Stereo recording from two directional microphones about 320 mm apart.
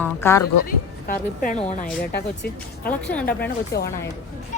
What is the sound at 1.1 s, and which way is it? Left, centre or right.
Speech, left.